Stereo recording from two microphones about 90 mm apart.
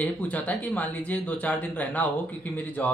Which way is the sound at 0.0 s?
15° left (ahead or behind).